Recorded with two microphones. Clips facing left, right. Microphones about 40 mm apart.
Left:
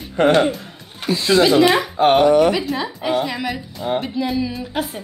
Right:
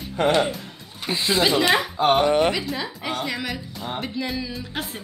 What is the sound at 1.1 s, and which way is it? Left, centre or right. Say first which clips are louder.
Speech: left 6 dB; right.